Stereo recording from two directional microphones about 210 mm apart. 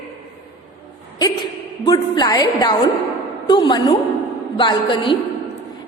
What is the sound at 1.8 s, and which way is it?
A woman's voice, 20° left (ahead or behind).